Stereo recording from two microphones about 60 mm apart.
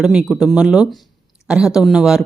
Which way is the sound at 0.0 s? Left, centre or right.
Centre.